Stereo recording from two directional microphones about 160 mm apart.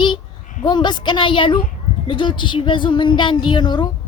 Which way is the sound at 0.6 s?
30° left (ahead or behind).